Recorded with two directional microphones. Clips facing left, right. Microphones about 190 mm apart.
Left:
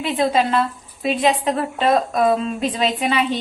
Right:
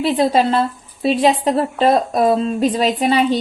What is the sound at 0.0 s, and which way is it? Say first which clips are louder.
A woman's voice: right 4 dB; 35° right (ahead or behind).